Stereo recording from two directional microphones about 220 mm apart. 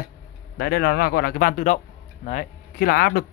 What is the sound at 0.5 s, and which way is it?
Speech, 45° left (ahead or behind).